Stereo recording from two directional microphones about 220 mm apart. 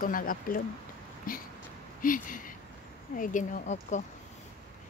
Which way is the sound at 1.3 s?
40° left (ahead or behind).